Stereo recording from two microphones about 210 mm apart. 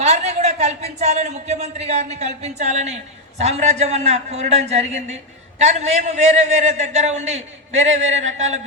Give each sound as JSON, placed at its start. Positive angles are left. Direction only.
{"t": 0.0, "sound": "a man's voice", "side_deg": -30}